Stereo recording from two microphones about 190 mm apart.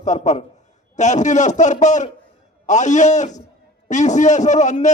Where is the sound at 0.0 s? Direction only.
40° left (ahead or behind).